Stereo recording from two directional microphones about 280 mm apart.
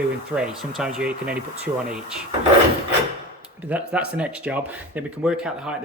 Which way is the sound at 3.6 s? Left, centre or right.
Centre.